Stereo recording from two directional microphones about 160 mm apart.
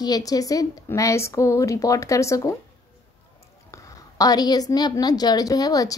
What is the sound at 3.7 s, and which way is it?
A woman's voice, 20° left (ahead or behind).